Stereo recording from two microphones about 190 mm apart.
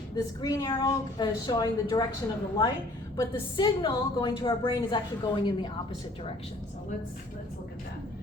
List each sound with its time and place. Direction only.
0.4 s a woman's voice: 20° left (ahead or behind)